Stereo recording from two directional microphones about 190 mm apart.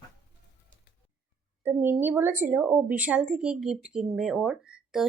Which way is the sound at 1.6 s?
10° right (ahead or behind).